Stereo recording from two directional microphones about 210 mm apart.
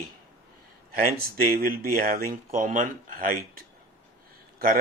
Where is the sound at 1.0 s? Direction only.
45° right (ahead or behind).